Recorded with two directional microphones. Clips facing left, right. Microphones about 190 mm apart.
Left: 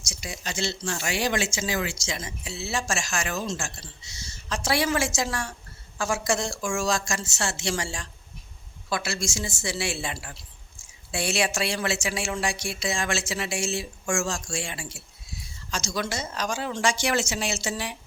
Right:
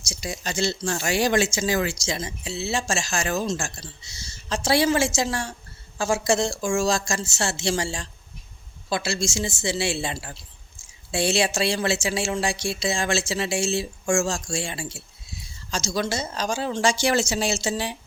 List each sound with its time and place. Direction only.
0.1 s speech: 35° right (ahead or behind)